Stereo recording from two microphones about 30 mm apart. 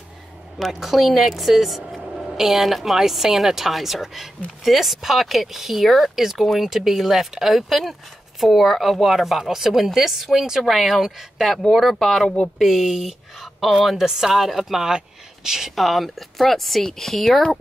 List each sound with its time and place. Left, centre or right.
0.6 s a woman's voice: centre
11.0 s a woman's voice: centre
11.7 s a woman's voice: centre
14.0 s a woman's voice: centre
14.9 s a sound: right
15.7 s a woman's voice: centre